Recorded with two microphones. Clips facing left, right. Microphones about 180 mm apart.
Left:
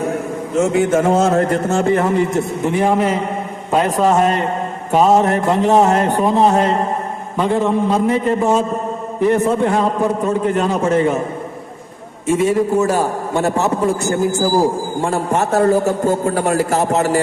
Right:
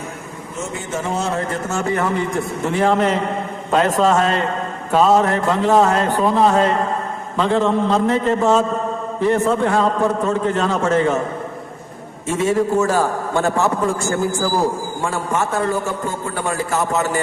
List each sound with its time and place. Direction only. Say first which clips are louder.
0.7 s a man's voice: left 9 dB; 60° left (ahead or behind); by 11.2 s 15° left (ahead or behind)
12.8 s a man's voice: left 1 dB; 20° left (ahead or behind)
14.3 s a man's voice: left 4 dB; 40° left (ahead or behind)